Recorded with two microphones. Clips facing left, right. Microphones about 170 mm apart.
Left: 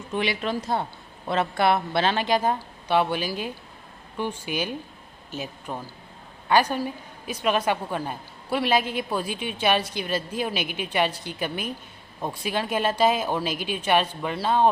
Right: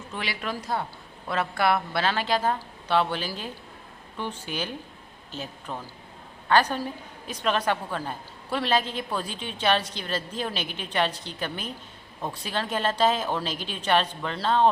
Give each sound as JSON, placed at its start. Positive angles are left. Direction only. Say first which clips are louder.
{"t": 0.1, "sound": "a woman's voice", "louder": "left 7 dB", "side_deg": 20}